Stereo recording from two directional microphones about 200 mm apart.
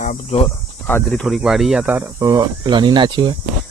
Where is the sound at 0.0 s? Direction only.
35° left (ahead or behind).